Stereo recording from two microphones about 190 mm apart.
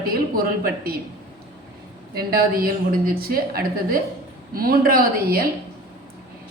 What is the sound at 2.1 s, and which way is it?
A woman's voice, 50° right (ahead or behind).